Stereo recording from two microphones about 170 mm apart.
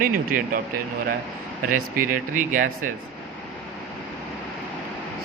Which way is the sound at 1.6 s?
55° right (ahead or behind).